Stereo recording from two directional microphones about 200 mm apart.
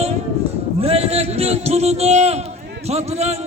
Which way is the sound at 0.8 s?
30° right (ahead or behind).